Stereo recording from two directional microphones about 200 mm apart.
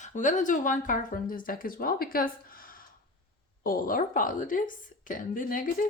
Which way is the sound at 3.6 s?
45° left (ahead or behind).